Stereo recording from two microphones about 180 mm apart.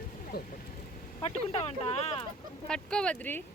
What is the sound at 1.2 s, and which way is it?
Speech, 35° left (ahead or behind).